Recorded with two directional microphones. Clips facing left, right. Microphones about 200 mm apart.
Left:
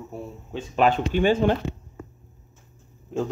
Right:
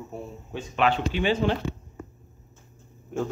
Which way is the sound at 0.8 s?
45° left (ahead or behind).